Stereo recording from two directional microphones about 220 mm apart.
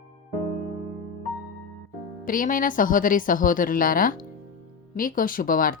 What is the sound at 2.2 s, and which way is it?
Speech, 40° left (ahead or behind).